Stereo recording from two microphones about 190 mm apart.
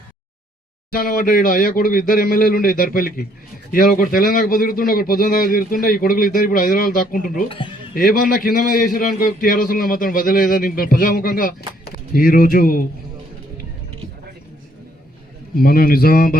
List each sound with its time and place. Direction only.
0.9 s a man's voice: 45° left (ahead or behind)
15.5 s a man's voice: 50° left (ahead or behind)